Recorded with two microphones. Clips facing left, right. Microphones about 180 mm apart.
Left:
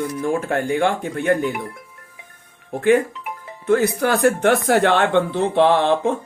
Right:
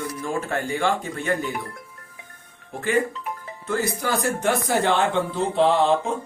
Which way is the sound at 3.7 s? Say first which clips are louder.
Left 7 dB; 65° left (ahead or behind).